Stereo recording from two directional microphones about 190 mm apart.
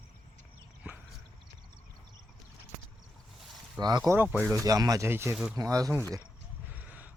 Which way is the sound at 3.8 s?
20° right (ahead or behind).